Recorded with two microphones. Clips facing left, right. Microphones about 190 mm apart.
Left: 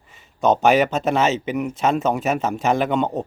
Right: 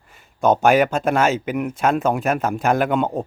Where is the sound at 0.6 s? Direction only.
Centre (ahead or behind).